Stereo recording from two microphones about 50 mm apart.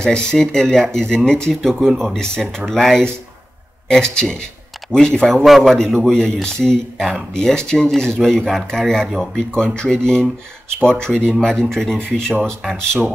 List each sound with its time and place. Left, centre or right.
0.0 s speech: centre
9.8 s speech: centre